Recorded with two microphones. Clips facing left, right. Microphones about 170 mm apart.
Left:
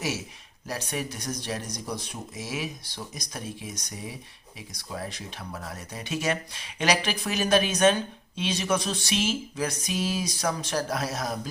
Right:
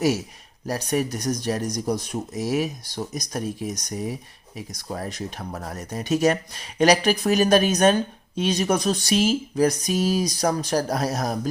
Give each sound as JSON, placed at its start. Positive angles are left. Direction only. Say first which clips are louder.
{"t": 0.7, "sound": "speech", "louder": "right 8 dB", "side_deg": -40}